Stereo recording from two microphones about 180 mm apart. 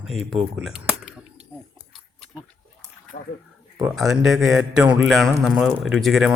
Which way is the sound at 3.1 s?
50° left (ahead or behind).